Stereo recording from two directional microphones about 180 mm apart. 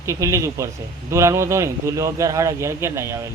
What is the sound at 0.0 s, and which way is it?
A man's voice, 15° right (ahead or behind).